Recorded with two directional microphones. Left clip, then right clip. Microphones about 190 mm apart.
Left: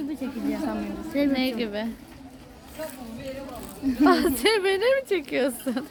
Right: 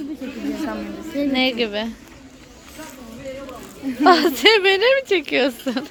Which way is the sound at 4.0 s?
15° right (ahead or behind).